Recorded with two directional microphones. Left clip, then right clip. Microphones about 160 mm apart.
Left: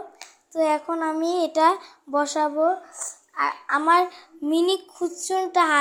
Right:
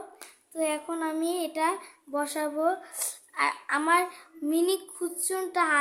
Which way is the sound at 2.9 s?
20° right (ahead or behind).